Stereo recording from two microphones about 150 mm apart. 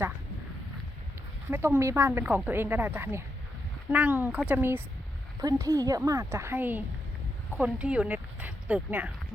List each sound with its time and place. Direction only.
1.5 s a woman's voice: 15° right (ahead or behind)